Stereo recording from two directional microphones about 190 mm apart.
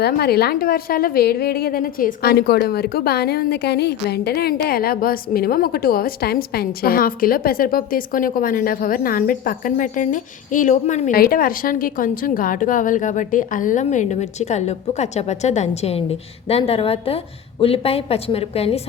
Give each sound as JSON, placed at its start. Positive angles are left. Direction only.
{"t": 0.0, "sound": "a woman's voice", "side_deg": 55}